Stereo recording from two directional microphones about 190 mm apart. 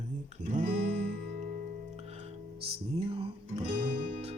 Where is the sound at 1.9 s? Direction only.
35° right (ahead or behind).